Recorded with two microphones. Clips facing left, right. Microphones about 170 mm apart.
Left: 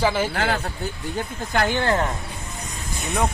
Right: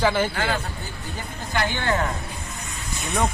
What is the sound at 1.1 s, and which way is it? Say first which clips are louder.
Speech: left 3 dB; 50° left (ahead or behind).